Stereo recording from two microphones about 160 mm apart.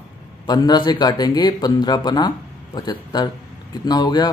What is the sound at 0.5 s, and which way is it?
Speech, 25° left (ahead or behind).